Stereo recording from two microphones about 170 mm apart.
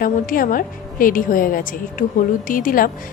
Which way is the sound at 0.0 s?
55° left (ahead or behind).